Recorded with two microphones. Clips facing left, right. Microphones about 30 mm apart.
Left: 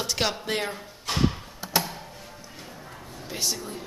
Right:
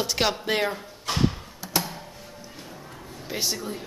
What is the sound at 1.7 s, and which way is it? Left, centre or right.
Music, centre.